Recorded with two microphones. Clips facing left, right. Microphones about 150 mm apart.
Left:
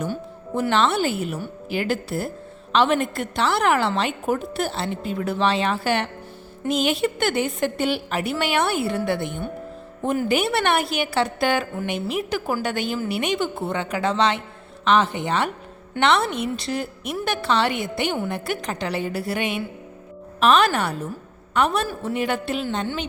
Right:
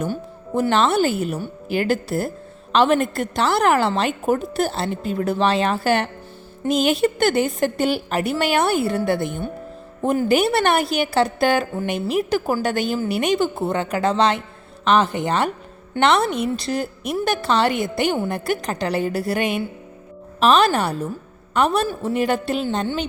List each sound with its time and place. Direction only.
0.0 s a woman's voice: 40° right (ahead or behind)